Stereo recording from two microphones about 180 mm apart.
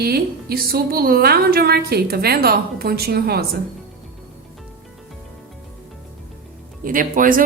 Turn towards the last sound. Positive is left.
turn(degrees=-50)  # may be behind; listen again after turning